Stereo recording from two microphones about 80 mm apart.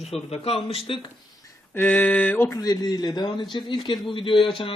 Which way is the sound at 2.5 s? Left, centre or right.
Left.